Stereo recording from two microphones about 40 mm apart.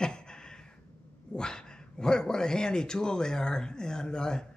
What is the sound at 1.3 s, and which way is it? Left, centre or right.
A man's voice, centre.